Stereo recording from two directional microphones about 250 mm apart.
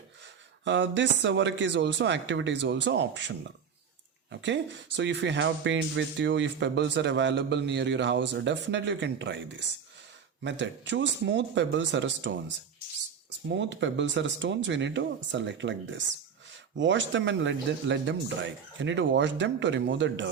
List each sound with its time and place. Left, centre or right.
0.6 s speech: right
13.5 s speech: right